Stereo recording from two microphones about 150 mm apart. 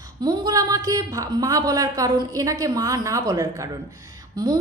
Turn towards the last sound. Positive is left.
turn(degrees=-30)  # may be behind; listen again after turning